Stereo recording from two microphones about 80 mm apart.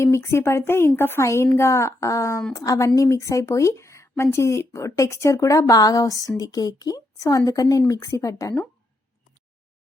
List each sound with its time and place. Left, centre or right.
0.0 s speech: left